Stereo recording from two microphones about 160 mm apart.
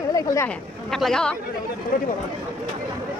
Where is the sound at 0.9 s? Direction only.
Centre (ahead or behind).